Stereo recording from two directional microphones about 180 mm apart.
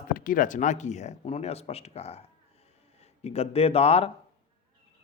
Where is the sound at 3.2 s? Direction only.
35° left (ahead or behind).